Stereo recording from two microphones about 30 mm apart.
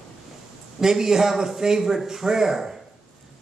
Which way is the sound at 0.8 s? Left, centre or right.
Centre.